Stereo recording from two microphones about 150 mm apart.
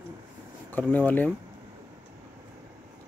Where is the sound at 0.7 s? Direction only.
10° left (ahead or behind).